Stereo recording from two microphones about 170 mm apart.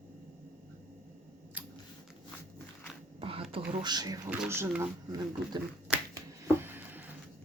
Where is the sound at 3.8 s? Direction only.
25° right (ahead or behind).